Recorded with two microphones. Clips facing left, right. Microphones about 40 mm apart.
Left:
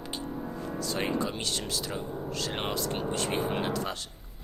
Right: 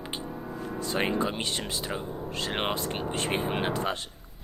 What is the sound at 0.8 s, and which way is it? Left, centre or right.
Speech, right.